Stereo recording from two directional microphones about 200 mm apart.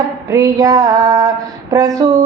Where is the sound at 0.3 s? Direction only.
15° right (ahead or behind).